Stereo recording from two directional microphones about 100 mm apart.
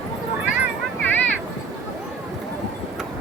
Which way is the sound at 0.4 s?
15° right (ahead or behind).